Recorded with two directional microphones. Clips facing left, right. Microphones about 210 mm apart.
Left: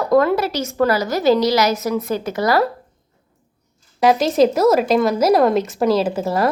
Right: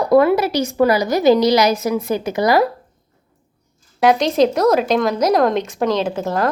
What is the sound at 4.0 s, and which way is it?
Speech, centre (ahead or behind).